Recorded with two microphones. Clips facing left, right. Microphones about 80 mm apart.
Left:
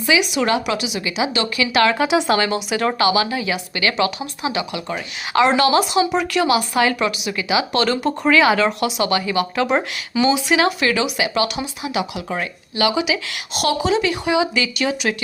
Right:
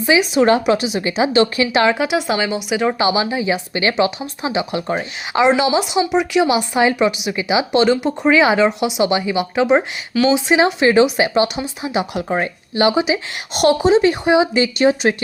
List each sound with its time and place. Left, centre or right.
0.0 s a woman's voice: right
2.0 s speech: centre
3.0 s a woman's voice: right
5.3 s speech: centre
10.2 s a woman's voice: right